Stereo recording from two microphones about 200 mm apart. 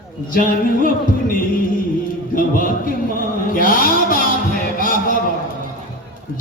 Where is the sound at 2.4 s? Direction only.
45° left (ahead or behind).